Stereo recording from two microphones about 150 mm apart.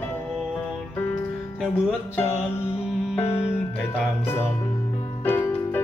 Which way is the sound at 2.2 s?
15° left (ahead or behind).